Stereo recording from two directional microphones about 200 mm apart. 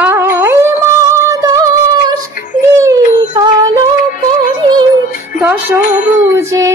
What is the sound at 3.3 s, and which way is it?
Female singing, 20° right (ahead or behind).